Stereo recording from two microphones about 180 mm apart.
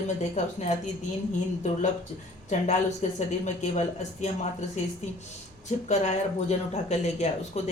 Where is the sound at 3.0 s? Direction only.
40° left (ahead or behind).